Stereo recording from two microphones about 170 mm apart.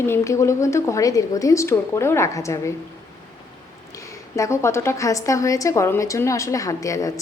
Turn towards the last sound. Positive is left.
turn(degrees=20)  # may be behind; listen again after turning